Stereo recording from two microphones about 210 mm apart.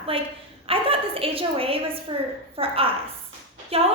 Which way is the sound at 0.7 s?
25° right (ahead or behind).